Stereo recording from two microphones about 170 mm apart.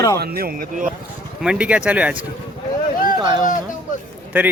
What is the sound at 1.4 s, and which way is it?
Speech, 5° right (ahead or behind).